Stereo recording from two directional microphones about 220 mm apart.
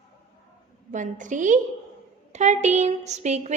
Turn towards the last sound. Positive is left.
turn(degrees=-30)  # may be behind; listen again after turning